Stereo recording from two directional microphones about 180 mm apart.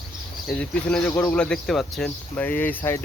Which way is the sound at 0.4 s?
5° left (ahead or behind).